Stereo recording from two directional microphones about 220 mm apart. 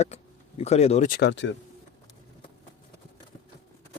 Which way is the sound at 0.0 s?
30° left (ahead or behind).